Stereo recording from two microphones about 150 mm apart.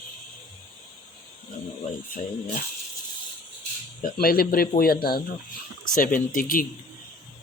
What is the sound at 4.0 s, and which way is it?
Speech, 70° left (ahead or behind).